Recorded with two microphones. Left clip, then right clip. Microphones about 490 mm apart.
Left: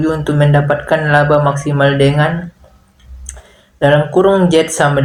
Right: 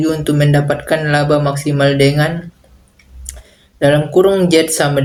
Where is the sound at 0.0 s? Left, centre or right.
Right.